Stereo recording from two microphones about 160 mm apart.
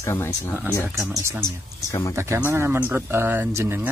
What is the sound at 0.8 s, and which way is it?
Speech, 20° right (ahead or behind).